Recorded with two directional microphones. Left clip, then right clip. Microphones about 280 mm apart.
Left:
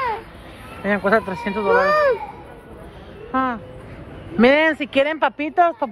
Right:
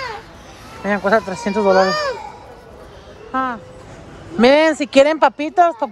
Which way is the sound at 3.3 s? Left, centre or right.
Centre.